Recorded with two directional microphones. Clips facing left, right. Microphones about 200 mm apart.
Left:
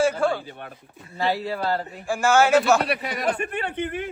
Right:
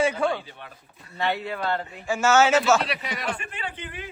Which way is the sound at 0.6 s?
55° left (ahead or behind).